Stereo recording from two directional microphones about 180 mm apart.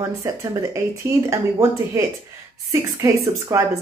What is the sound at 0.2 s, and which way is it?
A woman's voice, 15° right (ahead or behind).